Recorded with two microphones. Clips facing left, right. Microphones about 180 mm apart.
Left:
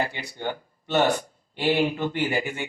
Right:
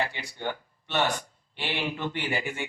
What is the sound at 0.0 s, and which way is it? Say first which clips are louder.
Speech: left 3 dB; 40° left (ahead or behind).